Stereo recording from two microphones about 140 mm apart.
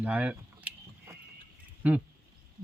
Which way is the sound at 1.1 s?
20° right (ahead or behind).